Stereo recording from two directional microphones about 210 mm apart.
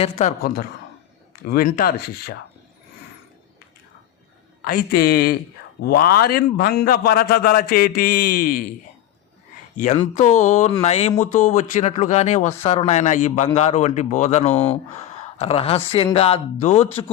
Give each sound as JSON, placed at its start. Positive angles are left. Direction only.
{"t": 0.0, "sound": "a man's voice", "side_deg": 35}
{"t": 4.6, "sound": "a man's voice", "side_deg": 45}
{"t": 9.7, "sound": "speech", "side_deg": 35}